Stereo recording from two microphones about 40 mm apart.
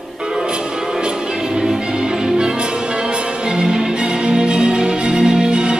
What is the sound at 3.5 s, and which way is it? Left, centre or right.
Music, centre.